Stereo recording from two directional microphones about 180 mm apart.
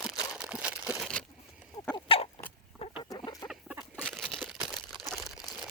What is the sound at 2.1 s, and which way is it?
Chicken, 30° left (ahead or behind).